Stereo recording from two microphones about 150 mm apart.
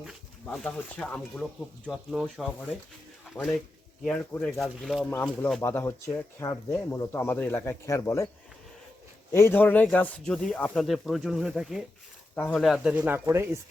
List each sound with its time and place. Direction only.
0.4 s speech: 5° left (ahead or behind)
4.6 s speech: centre (ahead or behind)
5.6 s speech: 15° left (ahead or behind)
9.3 s speech: 15° left (ahead or behind); by 13.6 s 15° right (ahead or behind)